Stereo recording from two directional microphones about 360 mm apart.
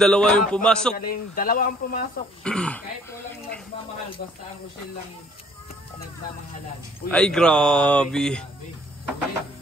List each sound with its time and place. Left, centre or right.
0.0 s speech: centre
0.9 s speech: left
2.4 s speech: centre
7.1 s speech: centre